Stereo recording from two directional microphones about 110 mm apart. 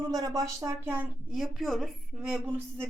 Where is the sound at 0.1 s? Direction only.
35° right (ahead or behind).